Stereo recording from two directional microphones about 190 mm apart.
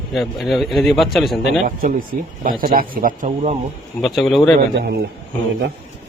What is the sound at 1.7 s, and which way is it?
Speech, 45° right (ahead or behind).